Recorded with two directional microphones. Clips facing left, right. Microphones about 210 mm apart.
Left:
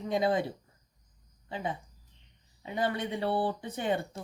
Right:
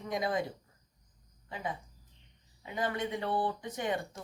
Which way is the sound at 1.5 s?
30° left (ahead or behind).